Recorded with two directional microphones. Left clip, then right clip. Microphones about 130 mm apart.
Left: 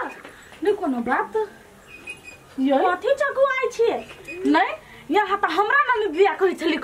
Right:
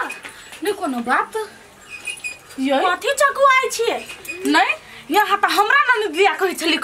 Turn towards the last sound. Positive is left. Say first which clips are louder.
# right 3 dB
turn(degrees=-5)  # may be behind; listen again after turning